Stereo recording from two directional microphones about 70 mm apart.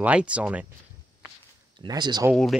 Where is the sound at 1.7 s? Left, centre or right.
Right.